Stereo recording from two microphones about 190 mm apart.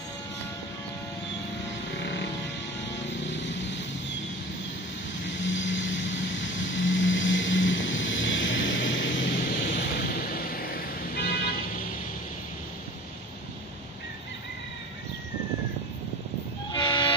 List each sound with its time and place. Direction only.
3.1 s vehicle: 70° left (ahead or behind)
5.4 s vehicle: 75° left (ahead or behind)
9.3 s thunder: 45° left (ahead or behind)
9.7 s vehicle: 55° left (ahead or behind)
16.7 s train: 25° left (ahead or behind)